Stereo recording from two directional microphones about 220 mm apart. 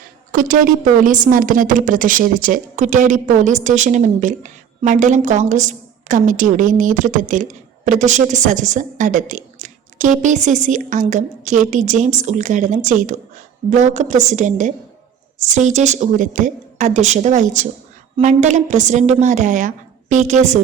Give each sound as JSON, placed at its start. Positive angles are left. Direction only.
{"t": 0.3, "sound": "a woman's voice", "side_deg": -40}